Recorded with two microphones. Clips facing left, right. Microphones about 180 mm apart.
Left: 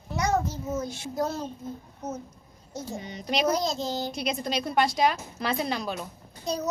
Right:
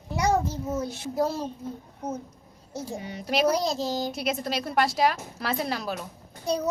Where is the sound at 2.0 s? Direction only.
30° right (ahead or behind).